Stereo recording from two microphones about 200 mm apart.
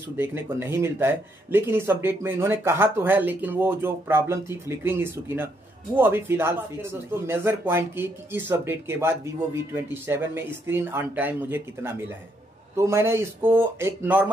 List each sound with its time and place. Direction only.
0.2 s a man's voice: 10° right (ahead or behind)